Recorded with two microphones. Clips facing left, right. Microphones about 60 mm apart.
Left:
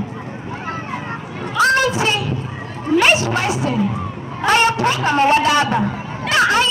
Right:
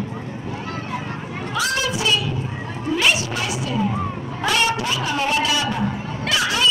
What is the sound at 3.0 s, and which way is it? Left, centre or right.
Music, left.